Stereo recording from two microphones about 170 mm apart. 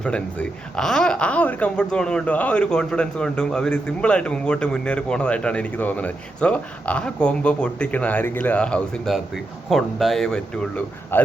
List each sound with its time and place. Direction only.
0.0 s speech: 5° left (ahead or behind)